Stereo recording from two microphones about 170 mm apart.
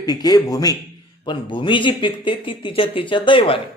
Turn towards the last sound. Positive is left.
turn(degrees=30)  # may be behind; listen again after turning